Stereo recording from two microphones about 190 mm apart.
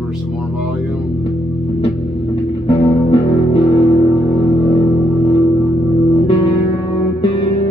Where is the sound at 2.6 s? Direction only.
30° left (ahead or behind).